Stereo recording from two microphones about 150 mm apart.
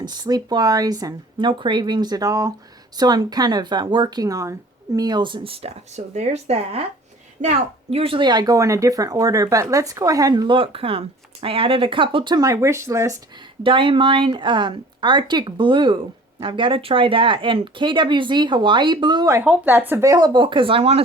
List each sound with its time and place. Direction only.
0.0 s speech: 25° right (ahead or behind)